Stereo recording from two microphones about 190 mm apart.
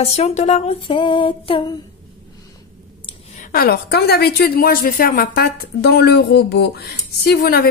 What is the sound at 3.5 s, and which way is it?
A woman's voice, 50° left (ahead or behind).